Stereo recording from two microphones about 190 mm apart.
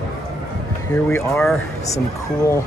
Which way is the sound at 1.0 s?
5° left (ahead or behind).